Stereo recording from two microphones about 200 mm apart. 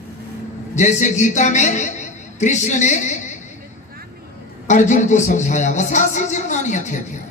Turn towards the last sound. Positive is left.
turn(degrees=35)  # may be behind; listen again after turning